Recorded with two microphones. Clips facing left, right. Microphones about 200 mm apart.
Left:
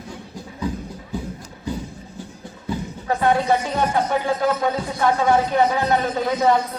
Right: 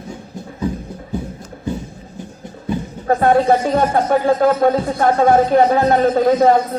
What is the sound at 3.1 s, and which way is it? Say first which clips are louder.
Speech: right 6 dB; 50° right (ahead or behind).